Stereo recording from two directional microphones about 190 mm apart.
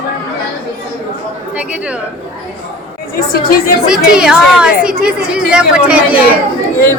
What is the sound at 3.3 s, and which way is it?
Speech, 50° left (ahead or behind).